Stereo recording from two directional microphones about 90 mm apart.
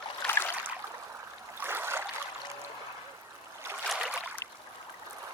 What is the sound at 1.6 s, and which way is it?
Stream, 25° right (ahead or behind).